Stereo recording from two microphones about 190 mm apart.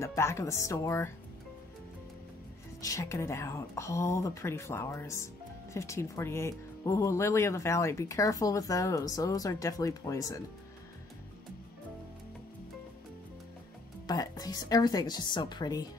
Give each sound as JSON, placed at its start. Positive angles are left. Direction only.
{"t": 0.0, "sound": "speech", "side_deg": 15}
{"t": 2.8, "sound": "speech", "side_deg": 15}
{"t": 14.0, "sound": "a woman's voice", "side_deg": 20}